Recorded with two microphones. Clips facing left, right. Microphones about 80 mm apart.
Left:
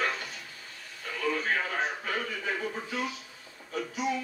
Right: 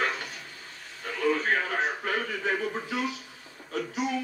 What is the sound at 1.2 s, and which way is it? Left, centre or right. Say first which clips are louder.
A man's voice: right 4 dB; right.